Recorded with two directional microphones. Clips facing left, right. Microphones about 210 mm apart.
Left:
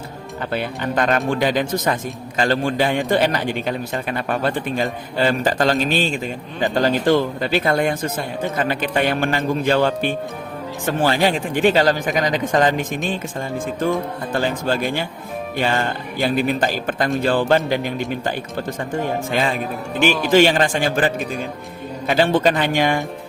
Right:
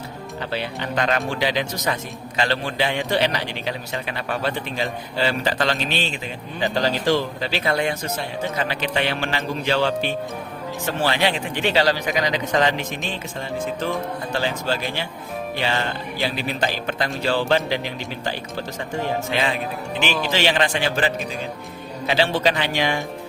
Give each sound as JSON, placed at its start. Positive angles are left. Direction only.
{"t": 0.5, "sound": "a man's voice", "side_deg": 50}
{"t": 14.3, "sound": "a man's voice", "side_deg": 50}